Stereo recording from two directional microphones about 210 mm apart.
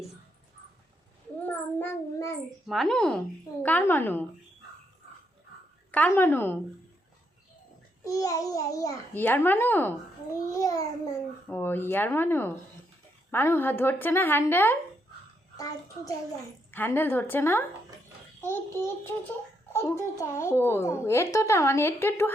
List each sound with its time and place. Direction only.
1.4 s child singing: 10° left (ahead or behind)
2.6 s a child's voice: centre (ahead or behind)
5.9 s a child's voice: 10° left (ahead or behind)
8.0 s a child's voice: 15° left (ahead or behind)